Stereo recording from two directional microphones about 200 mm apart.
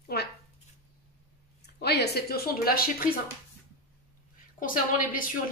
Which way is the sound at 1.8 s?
55° left (ahead or behind).